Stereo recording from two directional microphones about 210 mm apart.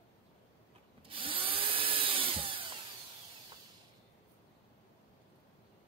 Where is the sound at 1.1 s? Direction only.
25° right (ahead or behind).